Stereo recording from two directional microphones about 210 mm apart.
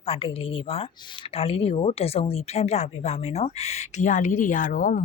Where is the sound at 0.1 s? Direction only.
25° left (ahead or behind).